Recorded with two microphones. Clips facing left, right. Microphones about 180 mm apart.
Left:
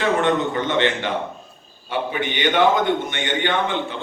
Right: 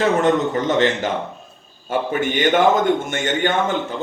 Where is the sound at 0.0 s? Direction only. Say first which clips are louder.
Right 3 dB; 40° right (ahead or behind).